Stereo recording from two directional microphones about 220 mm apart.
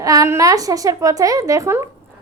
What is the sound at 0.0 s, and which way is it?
A woman's voice, 15° right (ahead or behind).